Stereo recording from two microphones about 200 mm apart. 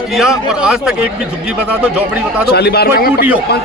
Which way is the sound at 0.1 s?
5° right (ahead or behind).